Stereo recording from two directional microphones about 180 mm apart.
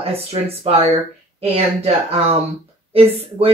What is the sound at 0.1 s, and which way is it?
Speech, 35° right (ahead or behind).